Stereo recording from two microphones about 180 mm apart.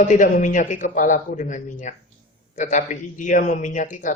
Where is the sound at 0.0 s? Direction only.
45° left (ahead or behind).